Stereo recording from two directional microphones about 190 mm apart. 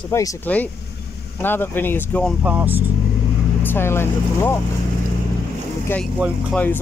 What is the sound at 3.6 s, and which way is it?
Speech, 10° left (ahead or behind).